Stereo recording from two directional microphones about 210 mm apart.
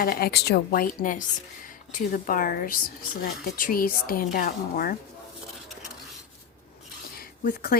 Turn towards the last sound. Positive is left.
turn(degrees=45)  # may be behind; listen again after turning